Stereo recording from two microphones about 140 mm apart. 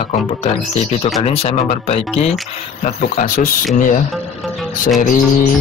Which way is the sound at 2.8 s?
65° left (ahead or behind).